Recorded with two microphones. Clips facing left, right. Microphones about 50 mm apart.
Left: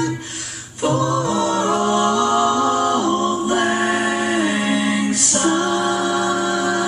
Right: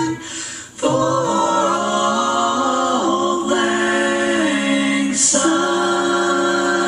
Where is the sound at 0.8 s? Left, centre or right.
Centre.